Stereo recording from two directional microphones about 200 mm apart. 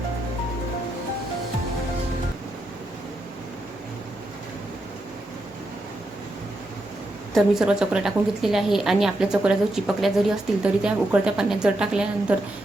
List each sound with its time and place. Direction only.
7.3 s a woman's voice: 5° right (ahead or behind)